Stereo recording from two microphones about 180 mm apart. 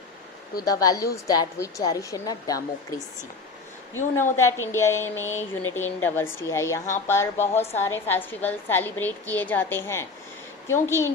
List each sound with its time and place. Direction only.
0.6 s a woman's voice: 20° left (ahead or behind)
4.4 s a woman's voice: 15° left (ahead or behind)